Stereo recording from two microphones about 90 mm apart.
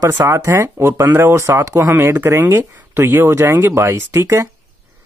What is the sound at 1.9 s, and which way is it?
Speech, 25° right (ahead or behind).